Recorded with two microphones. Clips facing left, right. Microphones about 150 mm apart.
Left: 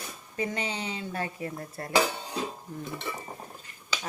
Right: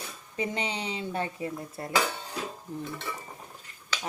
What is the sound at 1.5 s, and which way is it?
Dishes, 10° right (ahead or behind).